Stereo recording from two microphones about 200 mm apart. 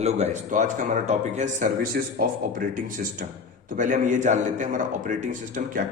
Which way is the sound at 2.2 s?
45° right (ahead or behind).